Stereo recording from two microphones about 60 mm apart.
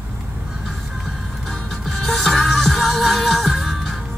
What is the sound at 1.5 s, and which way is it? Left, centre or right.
Music, centre.